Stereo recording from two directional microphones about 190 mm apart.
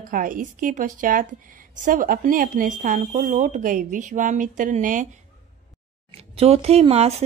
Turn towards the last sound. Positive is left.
turn(degrees=-30)  # may be behind; listen again after turning